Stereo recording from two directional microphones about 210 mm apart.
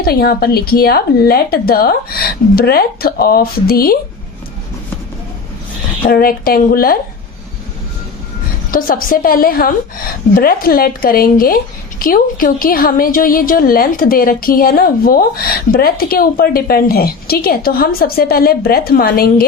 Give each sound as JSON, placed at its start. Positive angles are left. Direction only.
{"t": 0.0, "sound": "a woman's voice", "side_deg": 45}
{"t": 6.1, "sound": "a woman's voice", "side_deg": 45}
{"t": 8.7, "sound": "a woman's voice", "side_deg": 40}